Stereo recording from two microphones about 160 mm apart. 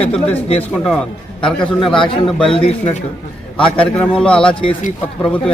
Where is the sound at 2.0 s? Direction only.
35° left (ahead or behind).